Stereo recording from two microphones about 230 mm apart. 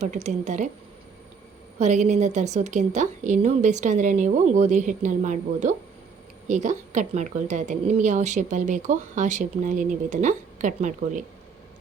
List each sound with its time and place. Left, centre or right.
0.0 s a woman's voice: right
1.8 s a woman's voice: right